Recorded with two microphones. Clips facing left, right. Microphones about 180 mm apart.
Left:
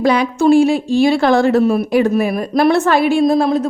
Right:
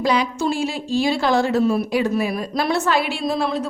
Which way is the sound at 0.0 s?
55° left (ahead or behind).